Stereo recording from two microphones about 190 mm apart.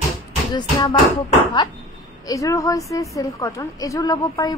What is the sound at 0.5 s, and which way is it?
Speech, 25° left (ahead or behind).